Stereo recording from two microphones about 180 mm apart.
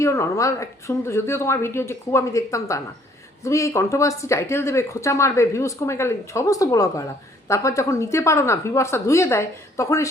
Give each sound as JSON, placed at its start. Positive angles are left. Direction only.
{"t": 0.0, "sound": "speech", "side_deg": 15}